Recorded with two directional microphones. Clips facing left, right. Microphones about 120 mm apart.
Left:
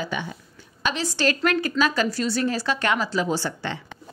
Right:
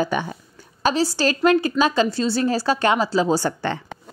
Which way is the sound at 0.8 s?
35° right (ahead or behind).